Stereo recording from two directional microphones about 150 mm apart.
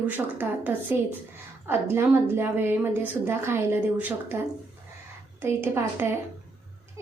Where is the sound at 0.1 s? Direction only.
10° right (ahead or behind).